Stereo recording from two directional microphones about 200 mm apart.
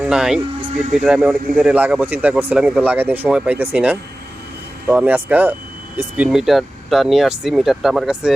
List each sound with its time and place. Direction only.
0.0 s speech: 5° right (ahead or behind)
0.7 s speech: 35° right (ahead or behind)
0.9 s speech: 5° right (ahead or behind)